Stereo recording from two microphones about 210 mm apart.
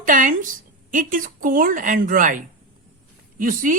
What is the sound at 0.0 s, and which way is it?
A woman's voice, 40° right (ahead or behind).